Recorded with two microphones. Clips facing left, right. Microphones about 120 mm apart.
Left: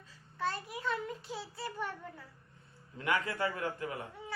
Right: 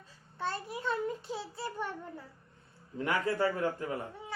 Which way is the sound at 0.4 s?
30° right (ahead or behind).